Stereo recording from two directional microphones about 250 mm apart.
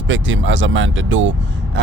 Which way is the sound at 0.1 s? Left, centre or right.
Right.